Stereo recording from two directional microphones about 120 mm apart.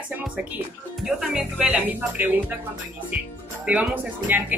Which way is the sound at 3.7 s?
10° right (ahead or behind).